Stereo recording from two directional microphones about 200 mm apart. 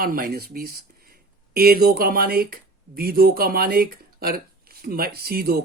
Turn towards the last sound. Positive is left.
turn(degrees=-50)  # may be behind; listen again after turning